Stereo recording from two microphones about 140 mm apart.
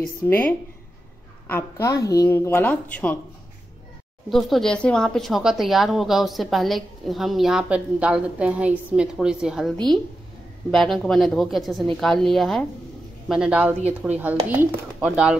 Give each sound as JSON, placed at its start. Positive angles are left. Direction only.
{"t": 0.0, "sound": "speech", "side_deg": 10}
{"t": 1.5, "sound": "a woman's voice", "side_deg": 20}
{"t": 4.3, "sound": "speech", "side_deg": 0}